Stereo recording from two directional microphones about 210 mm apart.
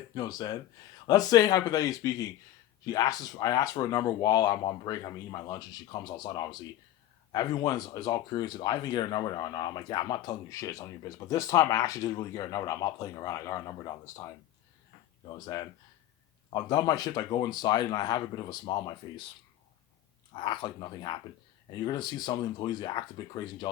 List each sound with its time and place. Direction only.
0.1 s speech: 20° left (ahead or behind)
15.4 s speech: 20° left (ahead or behind)
20.3 s speech: 20° left (ahead or behind)